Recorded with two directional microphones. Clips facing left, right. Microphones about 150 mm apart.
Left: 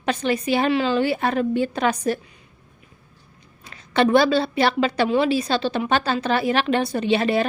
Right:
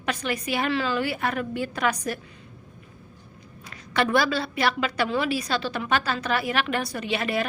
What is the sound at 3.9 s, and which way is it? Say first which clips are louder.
A woman's voice: left 6 dB; 25° left (ahead or behind).